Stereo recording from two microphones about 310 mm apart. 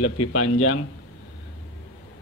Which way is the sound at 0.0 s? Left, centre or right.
Left.